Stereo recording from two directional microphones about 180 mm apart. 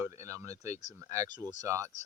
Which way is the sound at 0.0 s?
15° right (ahead or behind).